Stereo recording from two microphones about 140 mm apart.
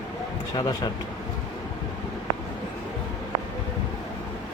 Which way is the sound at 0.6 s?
30° left (ahead or behind).